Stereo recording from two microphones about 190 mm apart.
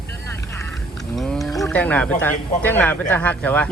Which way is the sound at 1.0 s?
Centre (ahead or behind).